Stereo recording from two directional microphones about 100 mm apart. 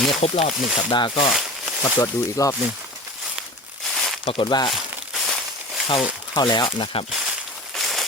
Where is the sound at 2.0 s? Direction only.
30° left (ahead or behind).